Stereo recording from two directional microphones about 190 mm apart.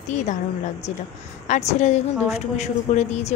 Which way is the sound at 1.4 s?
40° left (ahead or behind).